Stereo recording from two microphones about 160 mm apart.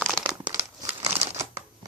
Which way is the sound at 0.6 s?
40° right (ahead or behind).